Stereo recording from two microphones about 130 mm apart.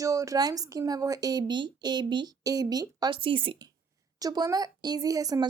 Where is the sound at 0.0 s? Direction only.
25° right (ahead or behind); by 3.5 s 40° right (ahead or behind).